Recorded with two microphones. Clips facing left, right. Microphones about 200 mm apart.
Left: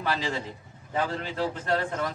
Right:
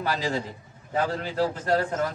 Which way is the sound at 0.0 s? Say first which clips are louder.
Right 2 dB; 40° right (ahead or behind).